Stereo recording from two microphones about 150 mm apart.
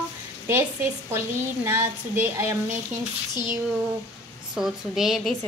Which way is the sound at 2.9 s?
55° right (ahead or behind).